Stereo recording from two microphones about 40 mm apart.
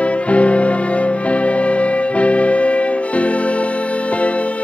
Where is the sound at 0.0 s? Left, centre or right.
Left.